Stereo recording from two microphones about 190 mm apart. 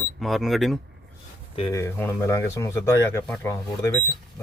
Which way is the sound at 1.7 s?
15° left (ahead or behind).